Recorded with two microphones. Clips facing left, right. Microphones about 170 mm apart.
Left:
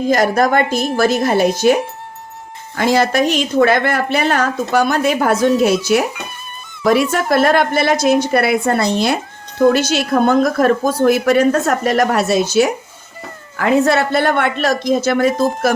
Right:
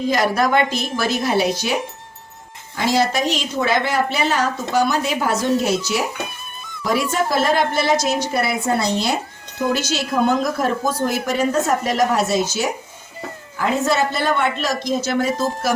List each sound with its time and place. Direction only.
0.1 s speech: 50° left (ahead or behind)